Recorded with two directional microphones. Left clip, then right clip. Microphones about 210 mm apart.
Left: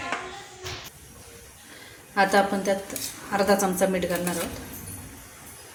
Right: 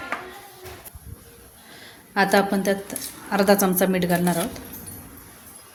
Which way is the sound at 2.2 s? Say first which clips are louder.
Right 1 dB; 55° right (ahead or behind).